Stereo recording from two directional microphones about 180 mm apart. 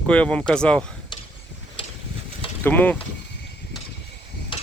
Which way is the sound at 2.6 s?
10° left (ahead or behind).